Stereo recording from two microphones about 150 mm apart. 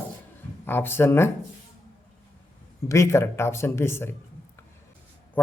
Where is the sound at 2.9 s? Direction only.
20° left (ahead or behind).